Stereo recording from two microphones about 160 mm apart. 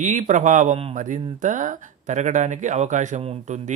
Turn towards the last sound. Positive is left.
turn(degrees=-40)  # may be behind; listen again after turning